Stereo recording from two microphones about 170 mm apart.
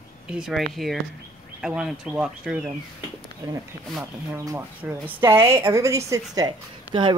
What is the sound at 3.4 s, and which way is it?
A woman's voice, 20° right (ahead or behind).